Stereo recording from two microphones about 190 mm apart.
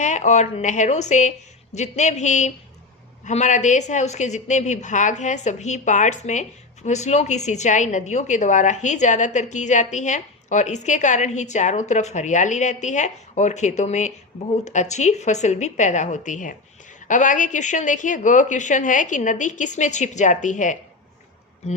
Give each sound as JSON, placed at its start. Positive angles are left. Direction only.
{"t": 0.0, "sound": "a woman's voice", "side_deg": 40}